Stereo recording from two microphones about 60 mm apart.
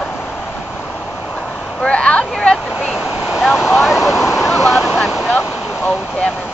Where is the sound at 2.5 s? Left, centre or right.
Centre.